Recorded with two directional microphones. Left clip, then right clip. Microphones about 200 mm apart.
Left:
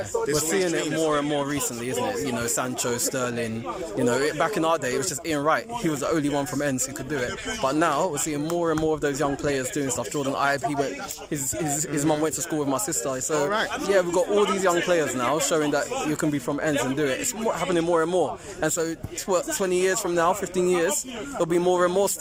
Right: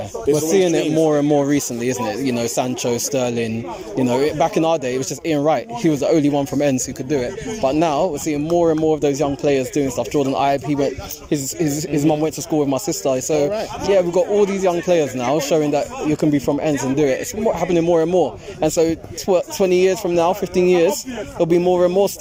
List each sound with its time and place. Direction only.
0.3 s speech: 15° right (ahead or behind)
11.9 s speech: 5° right (ahead or behind)